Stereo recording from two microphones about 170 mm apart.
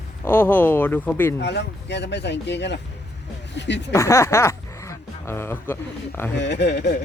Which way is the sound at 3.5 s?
90° left.